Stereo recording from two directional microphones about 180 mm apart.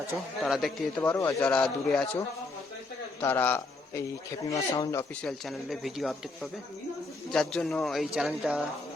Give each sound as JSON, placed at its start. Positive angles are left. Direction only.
{"t": 0.4, "sound": "speech", "side_deg": 0}
{"t": 1.1, "sound": "speech", "side_deg": 10}
{"t": 3.2, "sound": "a man's voice", "side_deg": 10}
{"t": 5.2, "sound": "speech", "side_deg": 0}